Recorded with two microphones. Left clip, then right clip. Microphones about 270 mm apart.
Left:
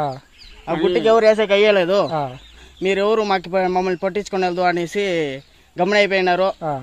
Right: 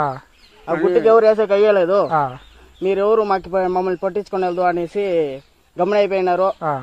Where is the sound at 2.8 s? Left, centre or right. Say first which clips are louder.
Right 2 dB; left.